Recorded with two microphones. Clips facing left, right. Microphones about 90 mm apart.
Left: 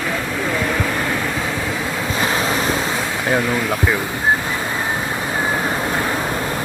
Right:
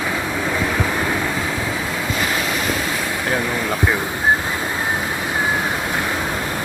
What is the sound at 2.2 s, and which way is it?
Waves, 30° left (ahead or behind).